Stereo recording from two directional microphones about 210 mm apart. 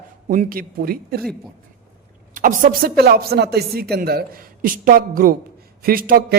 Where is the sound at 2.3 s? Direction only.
40° right (ahead or behind).